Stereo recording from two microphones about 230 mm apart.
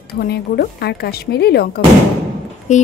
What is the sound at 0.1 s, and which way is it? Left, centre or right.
Speech, left.